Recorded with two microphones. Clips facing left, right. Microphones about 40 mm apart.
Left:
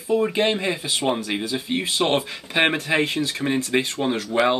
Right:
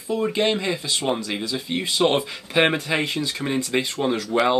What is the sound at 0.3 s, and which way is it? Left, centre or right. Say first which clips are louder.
Speech: even; left.